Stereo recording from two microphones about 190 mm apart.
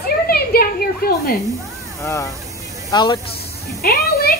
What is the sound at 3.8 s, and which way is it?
Speech, 55° left (ahead or behind).